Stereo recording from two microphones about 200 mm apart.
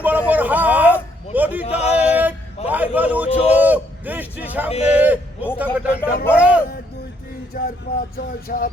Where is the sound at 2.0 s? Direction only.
5° right (ahead or behind).